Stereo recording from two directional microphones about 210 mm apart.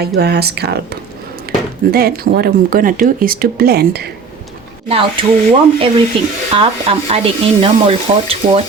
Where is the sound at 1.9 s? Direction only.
45° right (ahead or behind).